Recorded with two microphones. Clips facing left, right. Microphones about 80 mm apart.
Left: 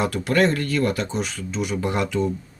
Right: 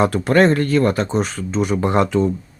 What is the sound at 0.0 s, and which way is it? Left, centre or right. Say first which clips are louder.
Speech: right 6 dB; right.